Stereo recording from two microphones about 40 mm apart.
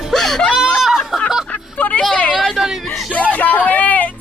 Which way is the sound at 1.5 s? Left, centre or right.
Left.